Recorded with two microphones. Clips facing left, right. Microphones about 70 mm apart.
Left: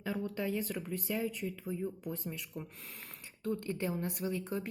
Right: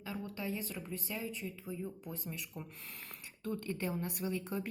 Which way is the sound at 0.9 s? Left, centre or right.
Left.